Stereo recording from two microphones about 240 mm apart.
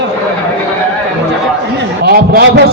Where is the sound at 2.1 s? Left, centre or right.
Right.